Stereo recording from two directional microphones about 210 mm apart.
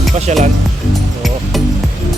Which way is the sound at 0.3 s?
35° right (ahead or behind).